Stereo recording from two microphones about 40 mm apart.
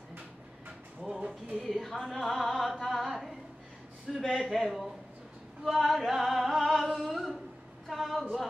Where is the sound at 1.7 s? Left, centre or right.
Centre.